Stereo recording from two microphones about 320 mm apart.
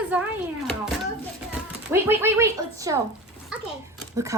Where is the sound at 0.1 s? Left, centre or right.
Centre.